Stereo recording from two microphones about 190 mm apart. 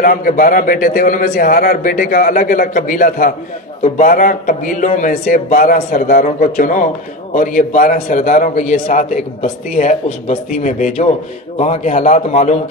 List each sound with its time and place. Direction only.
0.0 s a man's voice: 45° left (ahead or behind)